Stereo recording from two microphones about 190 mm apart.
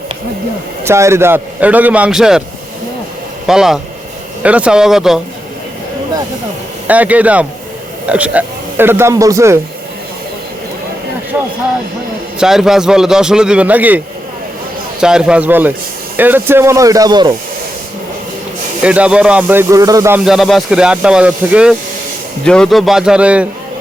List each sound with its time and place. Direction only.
0.9 s a man's voice: 15° right (ahead or behind)
3.4 s a man's voice: 5° right (ahead or behind)
6.8 s a man's voice: 10° right (ahead or behind)
12.4 s a man's voice: centre (ahead or behind)
15.0 s a man's voice: 5° right (ahead or behind); by 17.3 s 20° right (ahead or behind)
18.8 s a man's voice: 5° right (ahead or behind)
20.2 s a man's voice: centre (ahead or behind)